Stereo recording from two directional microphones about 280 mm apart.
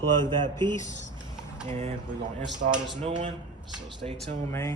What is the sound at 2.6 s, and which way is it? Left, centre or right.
Speech, right.